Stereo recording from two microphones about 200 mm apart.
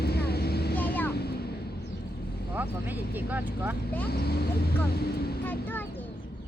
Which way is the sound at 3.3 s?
10° right (ahead or behind).